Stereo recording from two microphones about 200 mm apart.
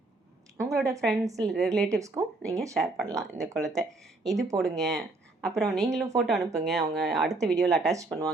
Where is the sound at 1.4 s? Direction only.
Centre (ahead or behind).